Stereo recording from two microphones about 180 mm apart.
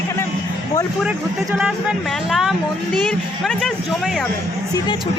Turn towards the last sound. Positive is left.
turn(degrees=0)  # may be behind; listen again after turning